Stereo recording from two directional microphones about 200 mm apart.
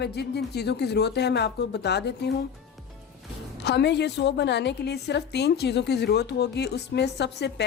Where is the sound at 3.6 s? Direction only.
60° left (ahead or behind).